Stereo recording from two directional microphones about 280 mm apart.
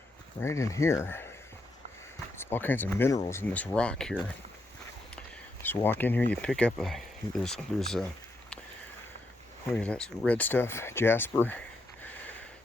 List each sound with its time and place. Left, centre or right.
0.4 s speech: centre
2.4 s speech: centre
5.6 s speech: centre
9.7 s speech: centre
12.0 s a sound: centre